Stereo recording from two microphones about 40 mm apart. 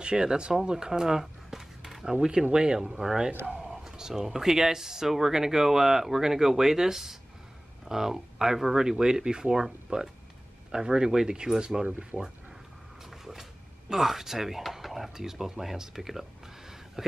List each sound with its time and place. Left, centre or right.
0.0 s speech: centre
2.1 s speech: right
13.2 s a sound: centre
15.1 s speech: centre